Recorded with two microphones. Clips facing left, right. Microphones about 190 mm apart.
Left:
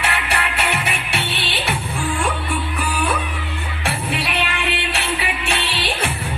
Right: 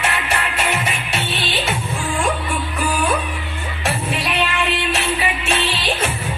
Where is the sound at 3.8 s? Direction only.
60° left (ahead or behind).